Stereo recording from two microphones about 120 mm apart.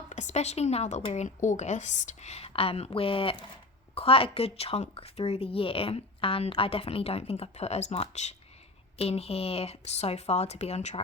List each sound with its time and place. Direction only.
0.1 s a woman's voice: 75° left (ahead or behind)
1.1 s speech: 80° left
9.0 s speech: 55° left (ahead or behind)